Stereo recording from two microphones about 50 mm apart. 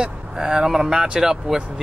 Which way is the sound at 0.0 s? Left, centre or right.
Centre.